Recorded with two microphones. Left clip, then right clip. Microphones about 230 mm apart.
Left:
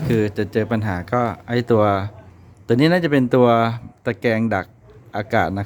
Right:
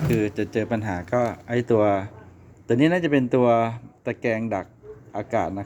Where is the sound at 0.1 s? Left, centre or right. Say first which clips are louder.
Left 5 dB; left.